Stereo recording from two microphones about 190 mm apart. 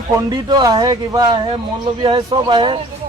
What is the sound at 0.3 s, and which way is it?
Speech, 20° right (ahead or behind).